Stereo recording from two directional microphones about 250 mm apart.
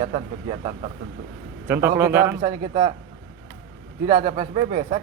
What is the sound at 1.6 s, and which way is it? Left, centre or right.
A man's voice, centre.